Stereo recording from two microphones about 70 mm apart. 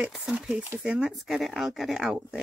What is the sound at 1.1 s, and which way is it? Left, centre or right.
Speech, centre.